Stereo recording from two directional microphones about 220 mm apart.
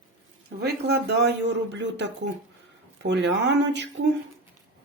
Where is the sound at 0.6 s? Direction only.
50° right (ahead or behind).